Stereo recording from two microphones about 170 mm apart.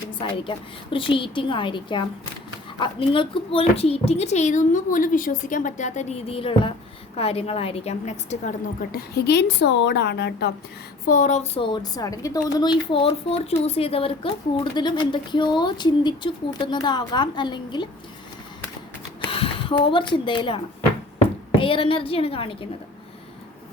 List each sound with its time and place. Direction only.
0.2 s a woman's voice: 30° left (ahead or behind)
9.0 s a woman's voice: 70° left (ahead or behind)
11.0 s a woman's voice: 50° left (ahead or behind); by 17.8 s 25° left (ahead or behind)
19.2 s speech: 30° left (ahead or behind)
21.6 s speech: 30° left (ahead or behind)